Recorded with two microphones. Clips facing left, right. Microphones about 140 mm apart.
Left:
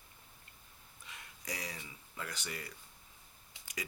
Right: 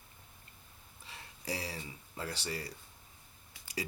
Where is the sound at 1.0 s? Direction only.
30° right (ahead or behind).